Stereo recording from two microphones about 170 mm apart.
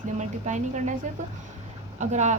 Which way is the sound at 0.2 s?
45° right (ahead or behind).